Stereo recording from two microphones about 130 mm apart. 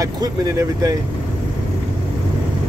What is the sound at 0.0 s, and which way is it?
Speech, 25° right (ahead or behind).